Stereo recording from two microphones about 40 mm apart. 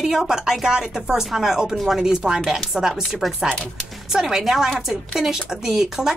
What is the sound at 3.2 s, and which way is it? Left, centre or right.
Speech, centre.